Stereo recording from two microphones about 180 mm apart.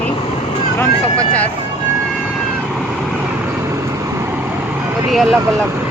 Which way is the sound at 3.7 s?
15° right (ahead or behind).